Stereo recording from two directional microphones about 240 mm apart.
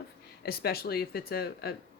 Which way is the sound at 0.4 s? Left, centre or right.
Left.